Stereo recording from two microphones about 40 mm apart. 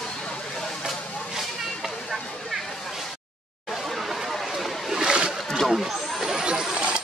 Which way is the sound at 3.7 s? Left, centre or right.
Centre.